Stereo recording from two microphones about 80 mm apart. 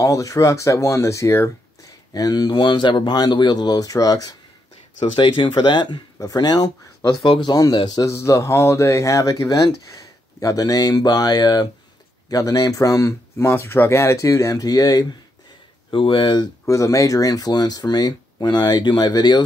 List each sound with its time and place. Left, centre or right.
0.0 s speech: left
1.9 s speech: left
5.1 s speech: left
6.1 s speech: left
7.2 s speech: left
7.7 s speech: left
8.0 s speech: left
15.9 s speech: left
16.6 s speech: left